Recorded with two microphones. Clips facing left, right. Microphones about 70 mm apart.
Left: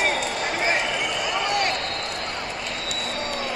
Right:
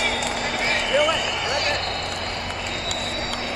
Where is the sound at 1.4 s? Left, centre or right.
Left.